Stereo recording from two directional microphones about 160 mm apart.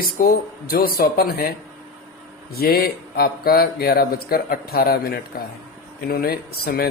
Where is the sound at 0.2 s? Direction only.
60° left (ahead or behind).